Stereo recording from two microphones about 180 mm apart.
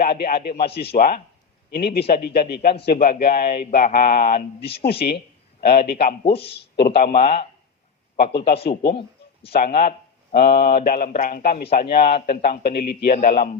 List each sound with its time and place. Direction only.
0.0 s speech: 55° left (ahead or behind)
4.6 s speech: 30° left (ahead or behind)
4.9 s a man's voice: 65° left (ahead or behind)